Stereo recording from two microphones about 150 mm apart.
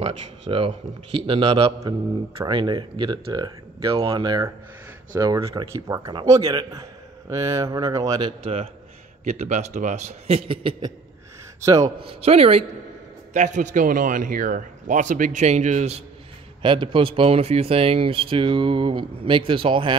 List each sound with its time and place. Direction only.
0.0 s speech: 35° right (ahead or behind)
1.8 s a man's voice: 25° right (ahead or behind)
9.2 s speech: 50° right (ahead or behind); by 10.9 s 35° right (ahead or behind)
11.6 s a man's voice: 25° right (ahead or behind)
12.0 s speech: 40° right (ahead or behind)
13.3 s a man's voice: 55° right (ahead or behind)
16.6 s speech: 35° right (ahead or behind)